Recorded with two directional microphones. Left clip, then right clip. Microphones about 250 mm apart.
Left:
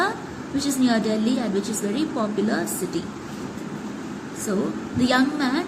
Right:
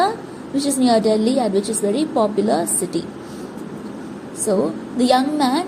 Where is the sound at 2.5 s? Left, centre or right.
Centre.